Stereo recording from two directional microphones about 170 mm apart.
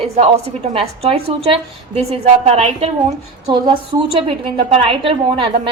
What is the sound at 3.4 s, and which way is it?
A woman's voice, 30° right (ahead or behind).